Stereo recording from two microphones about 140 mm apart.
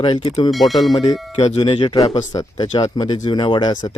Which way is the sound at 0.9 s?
30° left (ahead or behind).